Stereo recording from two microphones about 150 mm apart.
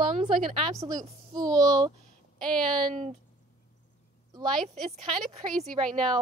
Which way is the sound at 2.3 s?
5° left (ahead or behind).